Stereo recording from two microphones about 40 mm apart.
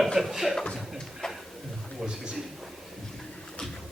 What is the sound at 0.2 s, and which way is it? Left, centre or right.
Speech, centre.